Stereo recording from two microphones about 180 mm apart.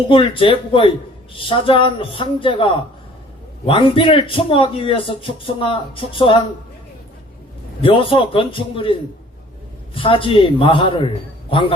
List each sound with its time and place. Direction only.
0.1 s a man's voice: 30° left (ahead or behind)
7.8 s a man's voice: 30° left (ahead or behind)